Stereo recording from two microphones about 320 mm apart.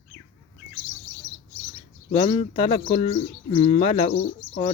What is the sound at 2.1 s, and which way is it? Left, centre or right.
Speech, centre.